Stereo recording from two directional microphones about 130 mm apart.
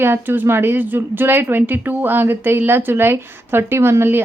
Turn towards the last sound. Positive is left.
turn(degrees=-20)  # may be behind; listen again after turning